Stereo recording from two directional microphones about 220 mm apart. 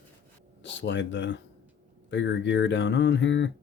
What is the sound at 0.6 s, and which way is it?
Speech, 55° left (ahead or behind).